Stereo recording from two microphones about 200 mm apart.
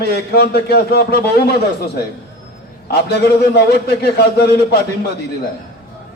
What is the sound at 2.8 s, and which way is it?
A man's voice, 55° left (ahead or behind).